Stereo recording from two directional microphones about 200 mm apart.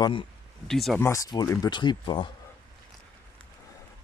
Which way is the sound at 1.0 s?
15° left (ahead or behind).